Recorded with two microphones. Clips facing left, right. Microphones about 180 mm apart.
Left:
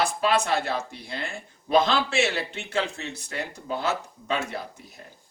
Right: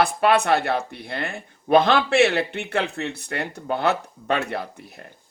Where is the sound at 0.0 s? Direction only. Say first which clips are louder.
Right 5 dB; 60° right (ahead or behind).